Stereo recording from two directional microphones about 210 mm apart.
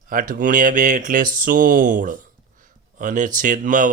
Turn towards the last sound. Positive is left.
turn(degrees=-35)  # may be behind; listen again after turning